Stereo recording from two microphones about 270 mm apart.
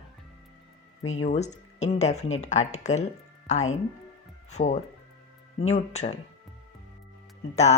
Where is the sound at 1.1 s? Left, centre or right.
Left.